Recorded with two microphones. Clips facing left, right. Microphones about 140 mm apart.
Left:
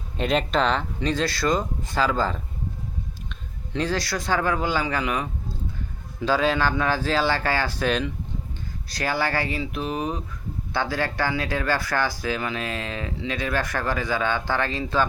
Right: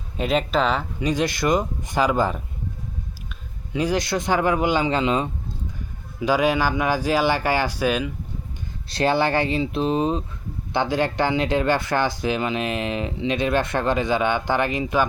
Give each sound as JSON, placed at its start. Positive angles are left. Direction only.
{"t": 0.2, "sound": "speech", "side_deg": -5}
{"t": 3.7, "sound": "speech", "side_deg": -10}
{"t": 6.1, "sound": "speech", "side_deg": -15}
{"t": 8.9, "sound": "speech", "side_deg": -25}